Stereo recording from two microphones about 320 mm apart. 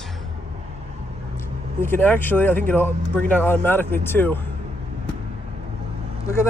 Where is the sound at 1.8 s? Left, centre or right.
Centre.